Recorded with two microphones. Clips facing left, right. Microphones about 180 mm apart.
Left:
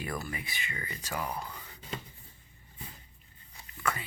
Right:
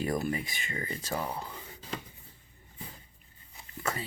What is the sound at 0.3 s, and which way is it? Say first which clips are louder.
Speech: right 6 dB; 40° right (ahead or behind).